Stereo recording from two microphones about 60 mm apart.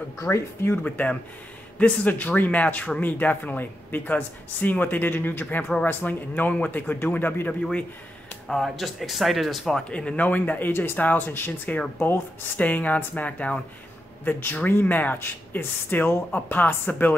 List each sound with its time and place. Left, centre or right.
0.2 s speech: left
0.8 s speech: left
8.5 s speech: centre
9.8 s speech: centre